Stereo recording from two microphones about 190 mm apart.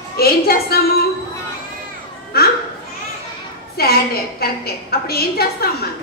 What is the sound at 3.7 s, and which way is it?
A woman's voice, 55° left (ahead or behind).